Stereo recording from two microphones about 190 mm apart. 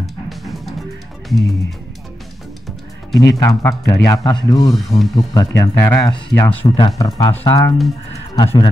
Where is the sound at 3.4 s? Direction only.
15° left (ahead or behind).